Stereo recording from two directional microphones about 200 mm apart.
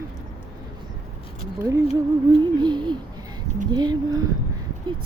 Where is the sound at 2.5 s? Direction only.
20° right (ahead or behind).